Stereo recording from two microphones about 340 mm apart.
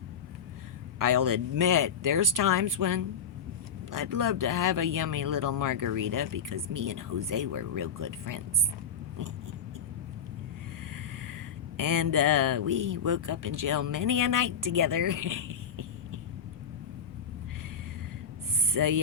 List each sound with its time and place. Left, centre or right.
0.9 s speech: right
11.8 s speech: right
18.7 s speech: right